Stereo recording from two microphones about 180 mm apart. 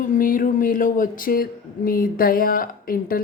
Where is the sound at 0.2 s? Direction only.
50° left (ahead or behind).